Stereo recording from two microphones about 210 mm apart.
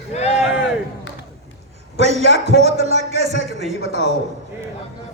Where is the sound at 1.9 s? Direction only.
30° right (ahead or behind).